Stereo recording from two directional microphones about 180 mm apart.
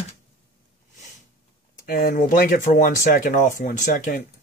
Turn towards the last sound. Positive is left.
turn(degrees=45)  # may be behind; listen again after turning